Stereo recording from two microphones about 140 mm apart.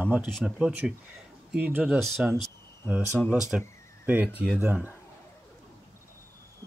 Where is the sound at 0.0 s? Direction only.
10° right (ahead or behind).